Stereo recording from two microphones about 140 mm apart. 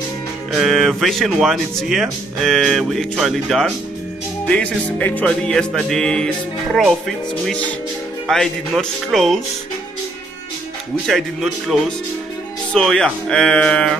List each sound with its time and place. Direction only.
0.5 s speech: centre (ahead or behind)
4.5 s music: 10° left (ahead or behind)
8.3 s speech: centre (ahead or behind)
11.1 s speech: centre (ahead or behind)